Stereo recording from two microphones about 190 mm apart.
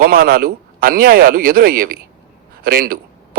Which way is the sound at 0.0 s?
50° right (ahead or behind).